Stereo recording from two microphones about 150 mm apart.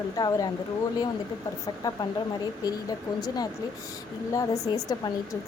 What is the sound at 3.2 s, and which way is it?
Speech, 25° left (ahead or behind).